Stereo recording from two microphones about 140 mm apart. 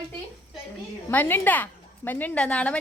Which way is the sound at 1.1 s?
15° left (ahead or behind).